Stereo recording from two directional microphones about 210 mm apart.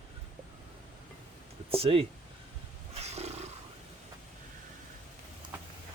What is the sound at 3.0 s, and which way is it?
Roaring cats, 30° right (ahead or behind).